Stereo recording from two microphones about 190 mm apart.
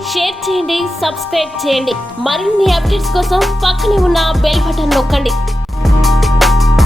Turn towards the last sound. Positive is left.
turn(degrees=0)  # may be behind; listen again after turning